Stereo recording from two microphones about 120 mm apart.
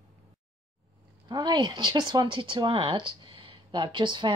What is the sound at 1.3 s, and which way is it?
Speech, 40° right (ahead or behind).